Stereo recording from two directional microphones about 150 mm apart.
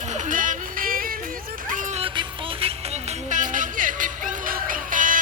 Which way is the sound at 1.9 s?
40° right (ahead or behind).